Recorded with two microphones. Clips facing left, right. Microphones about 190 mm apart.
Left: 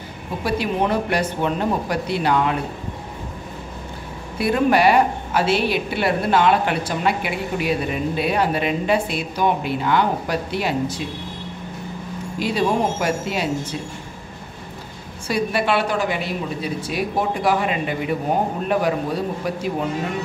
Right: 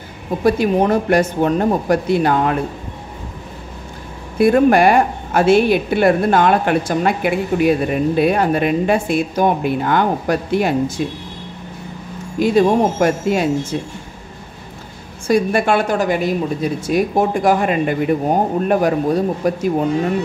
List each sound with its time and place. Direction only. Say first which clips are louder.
0.4 s a woman's voice: right 7 dB; 45° right (ahead or behind)
4.4 s a woman's voice: right 6 dB; 50° right (ahead or behind)
12.4 s a woman's voice: right 7 dB; 45° right (ahead or behind)
15.2 s a woman's voice: right 6 dB; 45° right (ahead or behind)